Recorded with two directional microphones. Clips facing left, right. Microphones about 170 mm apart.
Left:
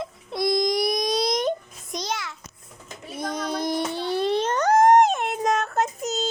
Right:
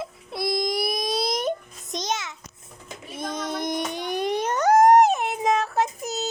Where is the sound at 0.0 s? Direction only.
5° right (ahead or behind).